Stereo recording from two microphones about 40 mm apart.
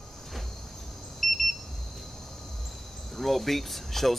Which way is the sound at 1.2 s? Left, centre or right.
Centre.